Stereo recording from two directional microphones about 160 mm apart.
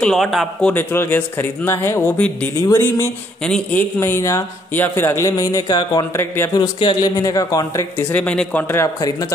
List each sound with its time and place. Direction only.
0.0 s a man's voice: centre (ahead or behind)
4.0 s speech: 15° left (ahead or behind)
8.1 s speech: 10° left (ahead or behind)